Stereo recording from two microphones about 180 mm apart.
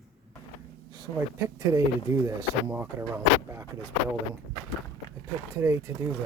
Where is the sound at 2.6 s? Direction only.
10° right (ahead or behind).